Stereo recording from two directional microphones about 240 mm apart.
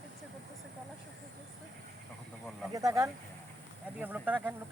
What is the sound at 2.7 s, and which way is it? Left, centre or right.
Speech, centre.